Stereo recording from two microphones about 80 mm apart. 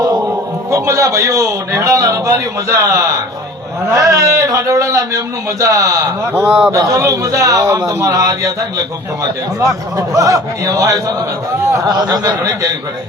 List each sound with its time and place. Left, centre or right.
0.7 s a man's voice: right
10.0 s a man's voice: right
11.6 s a sound: right
11.9 s speech: right